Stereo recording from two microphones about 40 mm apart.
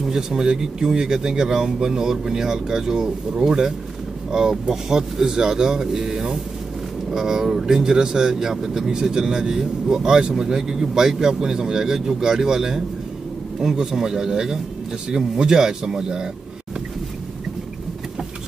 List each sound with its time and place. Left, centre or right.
0.0 s speech: centre